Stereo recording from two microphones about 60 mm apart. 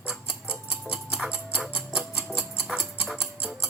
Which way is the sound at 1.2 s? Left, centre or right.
Right.